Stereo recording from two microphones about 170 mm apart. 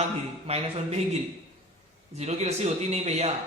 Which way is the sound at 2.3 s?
40° right (ahead or behind).